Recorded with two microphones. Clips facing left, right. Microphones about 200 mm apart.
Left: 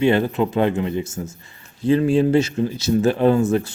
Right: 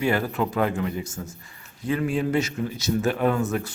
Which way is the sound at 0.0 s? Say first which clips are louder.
Left 6 dB; 25° left (ahead or behind).